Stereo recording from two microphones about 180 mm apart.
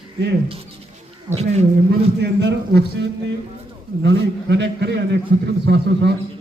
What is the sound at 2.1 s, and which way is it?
A man's voice, 70° right (ahead or behind).